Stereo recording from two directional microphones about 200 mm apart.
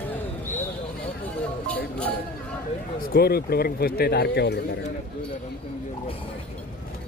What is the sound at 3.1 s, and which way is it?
A man's voice, 50° left (ahead or behind).